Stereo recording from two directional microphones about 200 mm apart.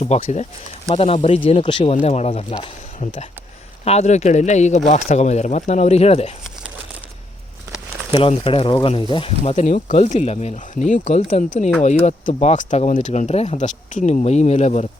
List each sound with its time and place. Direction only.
0.0 s speech: 30° left (ahead or behind)
8.1 s speech: 25° left (ahead or behind)